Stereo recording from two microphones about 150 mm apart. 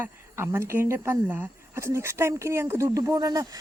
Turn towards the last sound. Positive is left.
turn(degrees=-25)  # may be behind; listen again after turning